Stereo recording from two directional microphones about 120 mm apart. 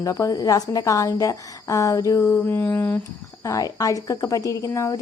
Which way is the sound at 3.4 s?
30° left (ahead or behind).